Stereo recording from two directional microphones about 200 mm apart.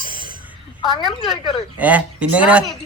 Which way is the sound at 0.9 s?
Centre (ahead or behind).